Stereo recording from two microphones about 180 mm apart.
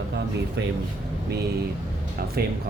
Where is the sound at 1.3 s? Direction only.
65° right (ahead or behind).